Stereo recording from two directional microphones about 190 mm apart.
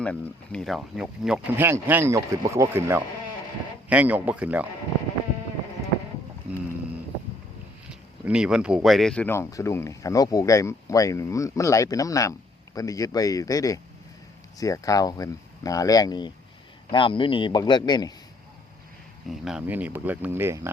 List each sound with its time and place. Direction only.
0.0 s speech: 5° left (ahead or behind)
7.9 s speech: 5° right (ahead or behind); by 18.1 s 20° left (ahead or behind)
19.3 s speech: 5° right (ahead or behind)